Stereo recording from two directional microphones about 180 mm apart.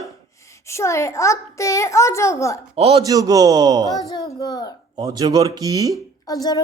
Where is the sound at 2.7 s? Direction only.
35° right (ahead or behind).